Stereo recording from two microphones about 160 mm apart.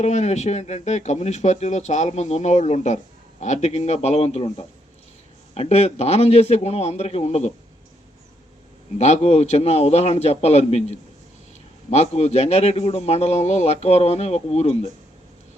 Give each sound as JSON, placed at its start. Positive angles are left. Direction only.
{"t": 0.0, "sound": "a man's voice", "side_deg": 45}
{"t": 9.0, "sound": "a man's voice", "side_deg": 45}